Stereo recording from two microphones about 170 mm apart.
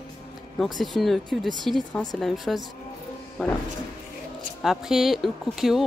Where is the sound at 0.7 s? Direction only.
Centre (ahead or behind).